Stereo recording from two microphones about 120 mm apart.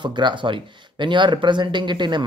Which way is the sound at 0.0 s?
40° right (ahead or behind).